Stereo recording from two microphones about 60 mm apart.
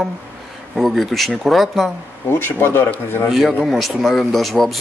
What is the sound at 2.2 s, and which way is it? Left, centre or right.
Speech, left.